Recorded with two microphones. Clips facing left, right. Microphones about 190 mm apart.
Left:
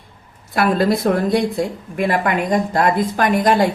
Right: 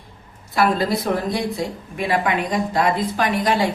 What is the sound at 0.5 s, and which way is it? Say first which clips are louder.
Speech: left 3 dB; 55° left (ahead or behind).